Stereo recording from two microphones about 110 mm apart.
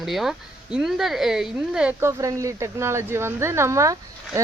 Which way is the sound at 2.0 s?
30° right (ahead or behind).